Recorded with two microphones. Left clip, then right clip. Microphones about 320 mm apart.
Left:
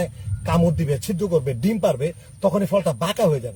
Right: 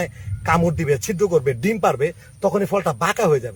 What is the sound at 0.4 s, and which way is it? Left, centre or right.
Speech, centre.